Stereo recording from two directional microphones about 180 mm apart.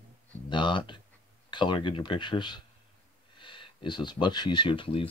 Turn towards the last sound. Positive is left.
turn(degrees=30)  # may be behind; listen again after turning